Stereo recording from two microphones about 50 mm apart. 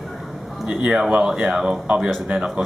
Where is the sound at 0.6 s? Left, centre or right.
Centre.